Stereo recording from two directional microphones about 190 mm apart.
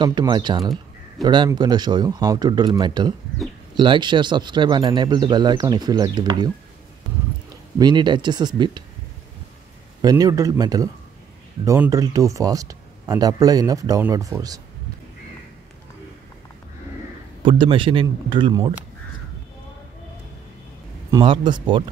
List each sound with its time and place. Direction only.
0.0 s speech: 25° right (ahead or behind)
7.8 s speech: 25° right (ahead or behind)
10.0 s speech: 20° right (ahead or behind)
17.5 s speech: 25° right (ahead or behind)
21.1 s speech: 25° right (ahead or behind)